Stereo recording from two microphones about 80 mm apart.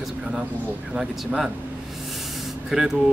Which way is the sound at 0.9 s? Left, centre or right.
Centre.